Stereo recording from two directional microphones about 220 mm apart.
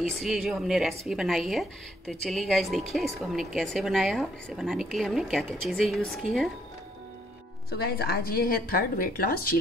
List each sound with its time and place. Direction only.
0.2 s a woman's voice: centre (ahead or behind)
7.7 s a woman's voice: 45° left (ahead or behind)